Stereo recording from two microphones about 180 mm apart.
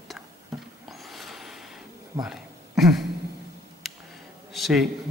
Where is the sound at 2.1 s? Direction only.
20° right (ahead or behind).